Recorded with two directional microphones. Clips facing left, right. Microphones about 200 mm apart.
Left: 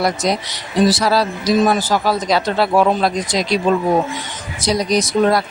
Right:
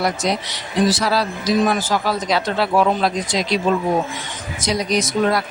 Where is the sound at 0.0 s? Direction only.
40° left (ahead or behind).